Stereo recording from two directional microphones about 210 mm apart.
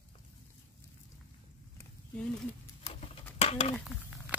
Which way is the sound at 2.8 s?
30° left (ahead or behind).